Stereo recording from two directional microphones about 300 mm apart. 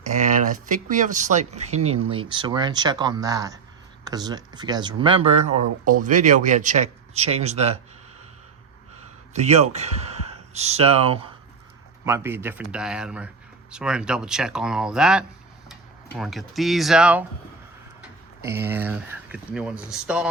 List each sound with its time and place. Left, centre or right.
0.1 s speech: right
9.3 s speech: right
12.0 s speech: centre
18.4 s speech: centre